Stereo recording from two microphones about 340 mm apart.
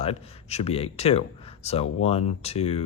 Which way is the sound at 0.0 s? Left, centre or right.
Centre.